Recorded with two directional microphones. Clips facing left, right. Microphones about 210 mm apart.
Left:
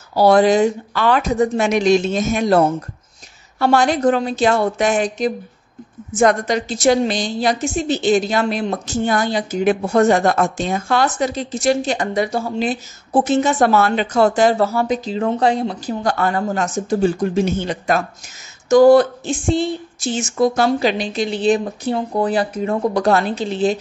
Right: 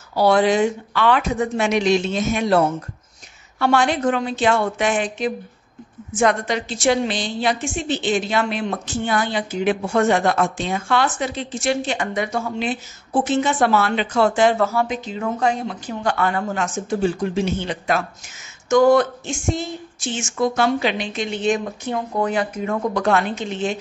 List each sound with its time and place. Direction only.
0.1 s a woman's voice: 40° left (ahead or behind)